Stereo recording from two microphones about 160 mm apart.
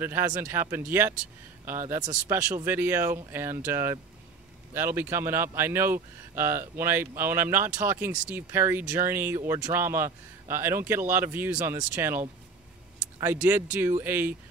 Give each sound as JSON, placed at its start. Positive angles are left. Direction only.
{"t": 0.0, "sound": "speech", "side_deg": -15}